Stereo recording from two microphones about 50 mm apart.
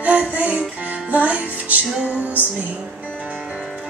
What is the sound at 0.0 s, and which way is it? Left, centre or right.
Music, right.